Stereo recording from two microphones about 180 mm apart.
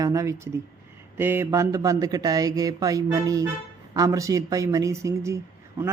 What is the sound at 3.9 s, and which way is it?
Mantra, 20° right (ahead or behind).